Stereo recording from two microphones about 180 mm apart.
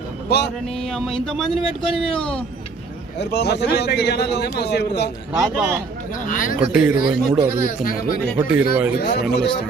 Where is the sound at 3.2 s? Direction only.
65° left (ahead or behind).